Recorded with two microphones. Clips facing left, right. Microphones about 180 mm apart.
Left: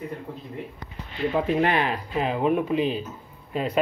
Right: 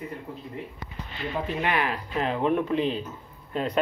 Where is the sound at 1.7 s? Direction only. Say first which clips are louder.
Left 3 dB; 25° left (ahead or behind).